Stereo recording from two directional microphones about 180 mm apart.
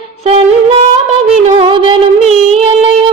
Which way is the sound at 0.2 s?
35° right (ahead or behind).